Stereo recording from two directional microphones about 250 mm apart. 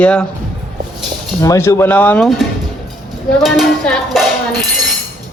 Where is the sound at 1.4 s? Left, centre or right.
Centre.